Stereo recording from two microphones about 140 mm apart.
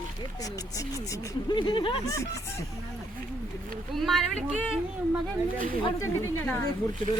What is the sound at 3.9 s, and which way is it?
Speech, centre (ahead or behind).